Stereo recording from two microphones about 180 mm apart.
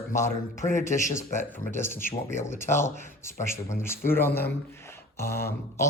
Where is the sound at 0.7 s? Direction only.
45° left (ahead or behind).